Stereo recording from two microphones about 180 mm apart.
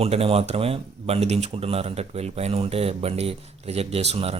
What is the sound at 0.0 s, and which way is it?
Speech, 35° right (ahead or behind).